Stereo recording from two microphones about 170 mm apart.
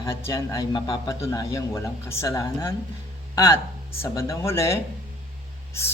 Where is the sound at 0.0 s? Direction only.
15° left (ahead or behind).